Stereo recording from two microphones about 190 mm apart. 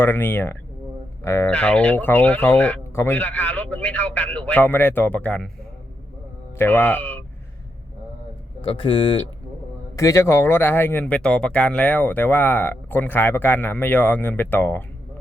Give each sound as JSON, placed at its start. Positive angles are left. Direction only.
{"t": 0.0, "sound": "speech", "side_deg": 10}
{"t": 6.6, "sound": "speech", "side_deg": 10}
{"t": 8.6, "sound": "speech", "side_deg": 25}
{"t": 9.9, "sound": "speech", "side_deg": 15}